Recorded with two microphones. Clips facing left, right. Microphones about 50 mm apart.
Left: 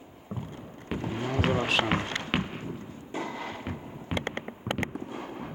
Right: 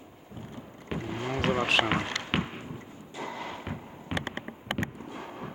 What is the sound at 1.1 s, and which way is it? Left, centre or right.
Vehicle, centre.